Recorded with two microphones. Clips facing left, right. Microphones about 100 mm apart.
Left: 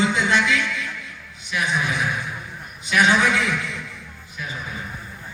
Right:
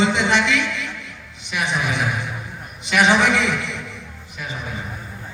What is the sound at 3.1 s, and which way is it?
Speech, 85° right.